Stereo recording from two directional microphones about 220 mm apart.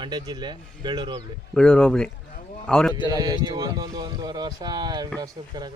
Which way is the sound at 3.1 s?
15° right (ahead or behind).